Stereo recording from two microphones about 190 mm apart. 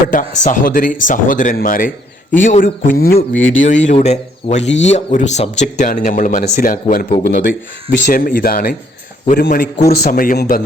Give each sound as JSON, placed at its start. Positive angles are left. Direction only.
{"t": 0.1, "sound": "speech", "side_deg": 45}
{"t": 3.3, "sound": "speech", "side_deg": 90}
{"t": 3.7, "sound": "speech", "side_deg": 40}